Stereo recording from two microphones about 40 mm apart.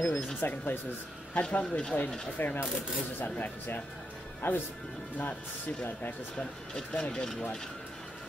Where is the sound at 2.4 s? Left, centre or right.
Left.